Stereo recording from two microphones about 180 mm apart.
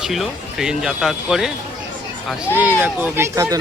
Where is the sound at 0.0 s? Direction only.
Centre (ahead or behind).